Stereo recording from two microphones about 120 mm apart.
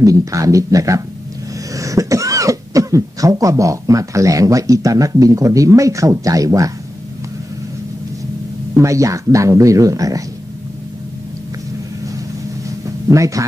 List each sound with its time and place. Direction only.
0.0 s speech: 25° right (ahead or behind)
8.7 s speech: 25° right (ahead or behind)
12.6 s a sound: 25° right (ahead or behind)